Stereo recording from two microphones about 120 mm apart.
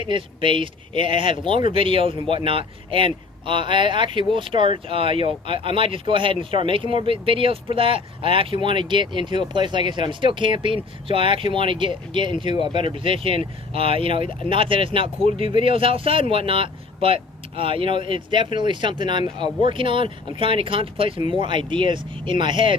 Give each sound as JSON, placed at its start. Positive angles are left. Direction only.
{"t": 0.0, "sound": "speech", "side_deg": -45}